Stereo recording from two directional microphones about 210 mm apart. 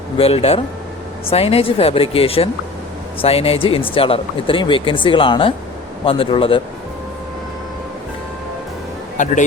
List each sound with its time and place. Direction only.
0.2 s speech: 30° left (ahead or behind)
9.1 s speech: 35° left (ahead or behind)